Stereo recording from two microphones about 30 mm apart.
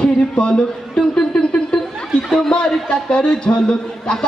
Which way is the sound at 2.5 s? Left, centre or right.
Left.